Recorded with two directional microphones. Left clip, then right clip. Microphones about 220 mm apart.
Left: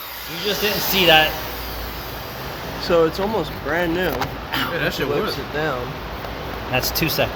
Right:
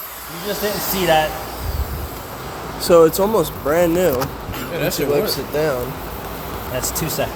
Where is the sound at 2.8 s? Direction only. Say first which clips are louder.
Right 6 dB; 15° right (ahead or behind).